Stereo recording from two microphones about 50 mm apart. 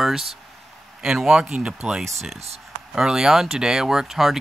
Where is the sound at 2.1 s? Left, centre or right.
Centre.